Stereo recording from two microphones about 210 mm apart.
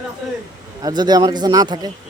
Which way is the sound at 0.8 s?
20° right (ahead or behind).